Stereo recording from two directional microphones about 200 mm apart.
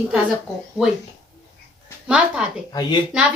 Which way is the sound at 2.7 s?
20° left (ahead or behind).